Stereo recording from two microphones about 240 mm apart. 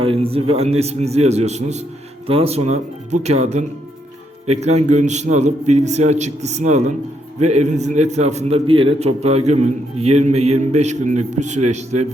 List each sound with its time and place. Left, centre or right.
0.0 s a man's voice: right